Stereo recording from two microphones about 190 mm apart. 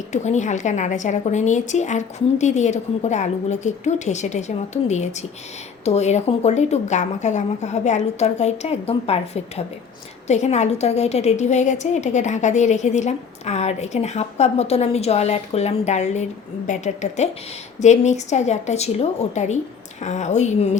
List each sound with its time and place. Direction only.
0.1 s a woman's voice: 40° left (ahead or behind)